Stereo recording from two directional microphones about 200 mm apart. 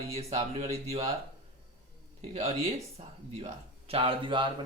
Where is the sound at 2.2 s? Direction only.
35° right (ahead or behind).